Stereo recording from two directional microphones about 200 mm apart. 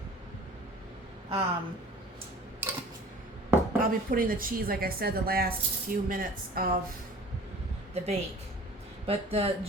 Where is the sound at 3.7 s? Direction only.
45° right (ahead or behind).